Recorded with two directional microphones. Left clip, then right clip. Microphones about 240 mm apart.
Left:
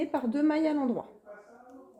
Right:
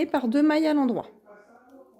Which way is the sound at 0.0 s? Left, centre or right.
Right.